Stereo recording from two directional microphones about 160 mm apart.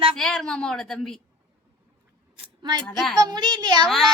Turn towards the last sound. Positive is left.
turn(degrees=0)  # may be behind; listen again after turning